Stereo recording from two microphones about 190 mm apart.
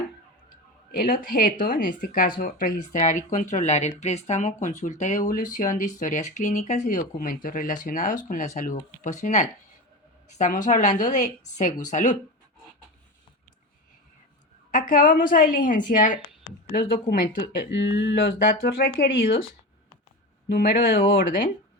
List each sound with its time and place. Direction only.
0.9 s speech: 50° left (ahead or behind)
14.7 s speech: 45° left (ahead or behind)
20.5 s speech: 50° left (ahead or behind)